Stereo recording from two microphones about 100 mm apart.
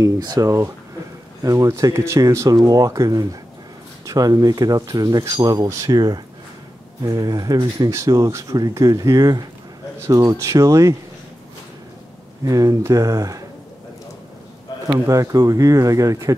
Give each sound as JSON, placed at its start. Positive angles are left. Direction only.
{"t": 0.0, "sound": "speech", "side_deg": -35}
{"t": 12.4, "sound": "speech", "side_deg": -35}
{"t": 15.0, "sound": "speech", "side_deg": -35}